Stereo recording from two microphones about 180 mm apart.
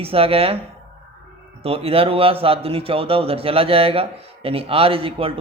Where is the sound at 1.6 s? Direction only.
35° right (ahead or behind).